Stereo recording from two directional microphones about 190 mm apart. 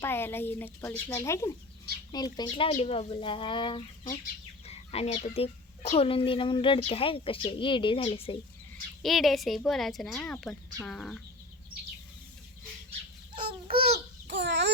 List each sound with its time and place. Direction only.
0.0 s a woman's voice: 10° left (ahead or behind); by 8.4 s 30° left (ahead or behind)
9.0 s a woman's voice: centre (ahead or behind)
13.9 s babbling: 70° right (ahead or behind)